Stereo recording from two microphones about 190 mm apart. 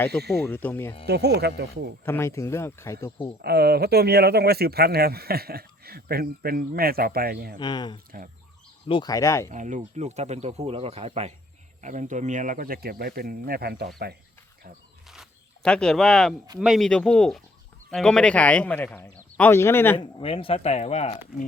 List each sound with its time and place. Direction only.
0.4 s a man's voice: 10° left (ahead or behind)
1.0 s speech: 60° right (ahead or behind)
2.0 s a man's voice: 15° left (ahead or behind)
3.4 s speech: 55° right (ahead or behind)
7.6 s a man's voice: 20° left (ahead or behind)
9.5 s speech: 40° right (ahead or behind); by 14.2 s 55° right (ahead or behind)
15.0 s zipper: centre (ahead or behind)
16.6 s a man's voice: centre (ahead or behind)
20.0 s speech: 25° left (ahead or behind)